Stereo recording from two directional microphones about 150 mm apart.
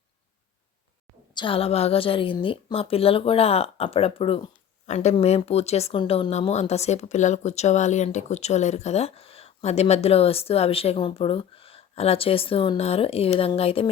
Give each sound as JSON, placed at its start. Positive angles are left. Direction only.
{"t": 1.3, "sound": "a woman's voice", "side_deg": 35}